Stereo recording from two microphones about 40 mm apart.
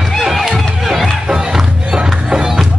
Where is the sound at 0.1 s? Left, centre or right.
Centre.